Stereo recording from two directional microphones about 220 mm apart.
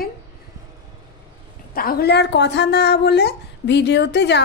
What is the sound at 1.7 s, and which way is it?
A woman's voice, 45° left (ahead or behind).